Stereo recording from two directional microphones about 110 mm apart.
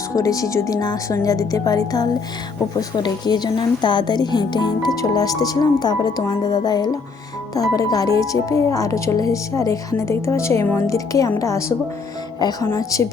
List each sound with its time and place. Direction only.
0.2 s a woman's voice: 30° left (ahead or behind)